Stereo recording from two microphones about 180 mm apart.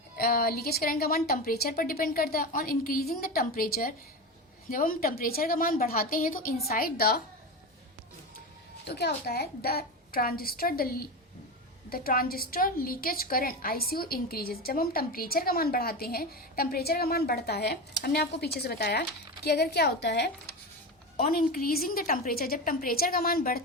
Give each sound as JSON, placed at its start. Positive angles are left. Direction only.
{"t": 0.2, "sound": "a woman's voice", "side_deg": 55}
{"t": 8.9, "sound": "a woman's voice", "side_deg": 65}
{"t": 21.2, "sound": "a woman's voice", "side_deg": 55}